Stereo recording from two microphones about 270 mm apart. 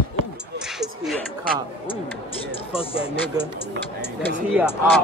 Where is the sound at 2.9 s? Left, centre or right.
Centre.